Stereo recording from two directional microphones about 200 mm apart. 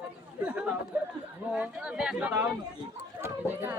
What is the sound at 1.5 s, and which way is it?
A man's voice, 5° right (ahead or behind).